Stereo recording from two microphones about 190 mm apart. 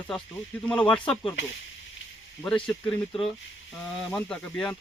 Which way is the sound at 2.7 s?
5° left (ahead or behind).